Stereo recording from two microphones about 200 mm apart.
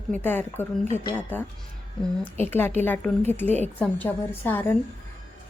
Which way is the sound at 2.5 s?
10° left (ahead or behind).